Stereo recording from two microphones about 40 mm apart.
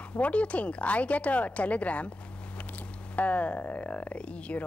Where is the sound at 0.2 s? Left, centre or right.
Left.